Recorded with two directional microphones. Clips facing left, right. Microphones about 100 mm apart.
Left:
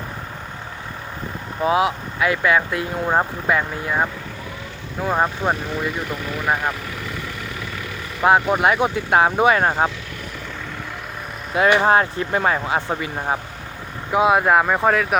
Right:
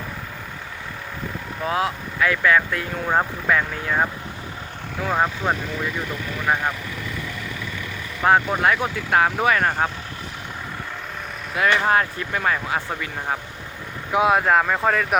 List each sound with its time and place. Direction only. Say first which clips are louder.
1.6 s speech: left 5 dB; 15° left (ahead or behind)
3.8 s speech: left 1 dB; 5° left (ahead or behind)
8.2 s speech: left 2 dB; 10° left (ahead or behind)
11.5 s speech: left 4 dB; 25° left (ahead or behind)
14.1 s speech: left 2 dB; centre (ahead or behind)